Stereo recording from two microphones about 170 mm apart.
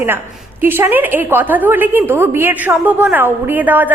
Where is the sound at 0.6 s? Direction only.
15° right (ahead or behind).